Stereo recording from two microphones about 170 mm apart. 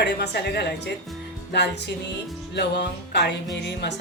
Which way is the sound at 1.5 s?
85° left.